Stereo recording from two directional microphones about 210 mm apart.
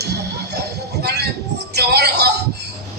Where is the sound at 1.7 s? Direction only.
50° right (ahead or behind).